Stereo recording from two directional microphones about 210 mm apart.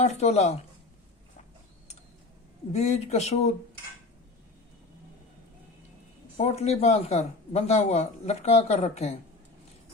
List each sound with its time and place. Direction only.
0.0 s speech: 30° left (ahead or behind)
2.7 s speech: 30° left (ahead or behind)
6.3 s speech: 30° left (ahead or behind)